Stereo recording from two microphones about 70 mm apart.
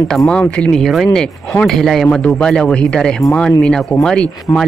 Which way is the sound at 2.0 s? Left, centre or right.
Centre.